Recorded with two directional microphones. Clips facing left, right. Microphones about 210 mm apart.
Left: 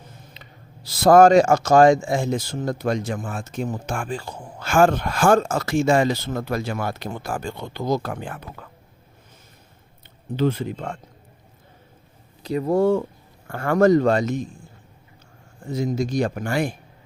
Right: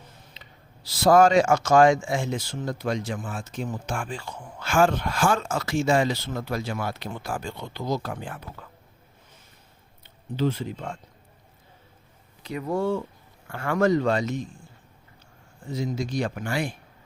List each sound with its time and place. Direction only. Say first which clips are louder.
0.4 s a sound: left 4 dB; 55° left (ahead or behind)
0.9 s speech: left 5 dB; 50° left (ahead or behind)
10.3 s speech: left 4 dB; 60° left (ahead or behind)
12.4 s speech: left 7 dB; 35° left (ahead or behind)
15.6 s speech: left 5 dB; 50° left (ahead or behind)